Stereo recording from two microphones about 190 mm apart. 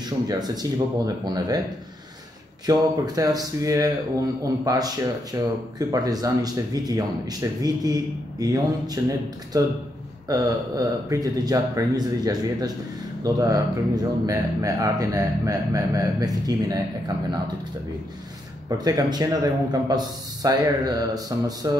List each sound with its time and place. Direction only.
0.0 s speech: 20° right (ahead or behind)
2.6 s speech: 20° right (ahead or behind)
18.7 s speech: 20° right (ahead or behind)